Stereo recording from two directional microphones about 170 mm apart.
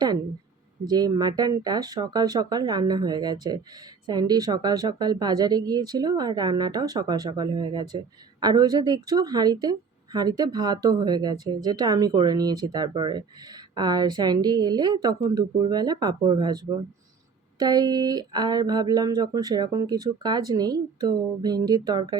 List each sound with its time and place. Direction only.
0.9 s a woman's voice: 20° right (ahead or behind)
17.6 s a woman's voice: 25° right (ahead or behind)